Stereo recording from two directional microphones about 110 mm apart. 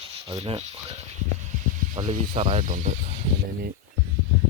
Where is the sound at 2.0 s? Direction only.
80° right.